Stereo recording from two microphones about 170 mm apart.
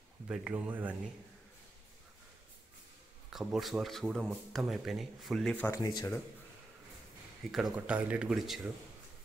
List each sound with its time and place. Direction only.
0.3 s speech: 5° right (ahead or behind)
3.3 s speech: centre (ahead or behind)
5.8 s speech: 25° left (ahead or behind)
7.7 s speech: 10° right (ahead or behind)